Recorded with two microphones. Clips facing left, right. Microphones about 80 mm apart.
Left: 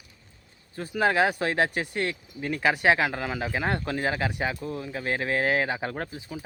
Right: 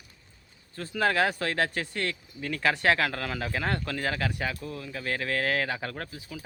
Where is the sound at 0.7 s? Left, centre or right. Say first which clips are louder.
Left 2 dB; centre.